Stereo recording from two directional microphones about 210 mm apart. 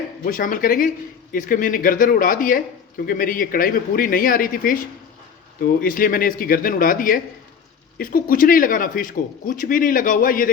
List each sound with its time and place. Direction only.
0.3 s speech: 40° left (ahead or behind)